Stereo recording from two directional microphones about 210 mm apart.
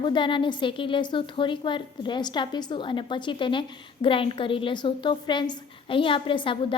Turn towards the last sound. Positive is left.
turn(degrees=25)  # may be behind; listen again after turning